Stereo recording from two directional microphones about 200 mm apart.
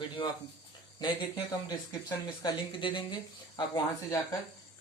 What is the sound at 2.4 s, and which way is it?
Speech, 25° left (ahead or behind).